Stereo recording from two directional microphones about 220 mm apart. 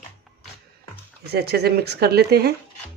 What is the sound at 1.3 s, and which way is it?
Speech, 45° right (ahead or behind).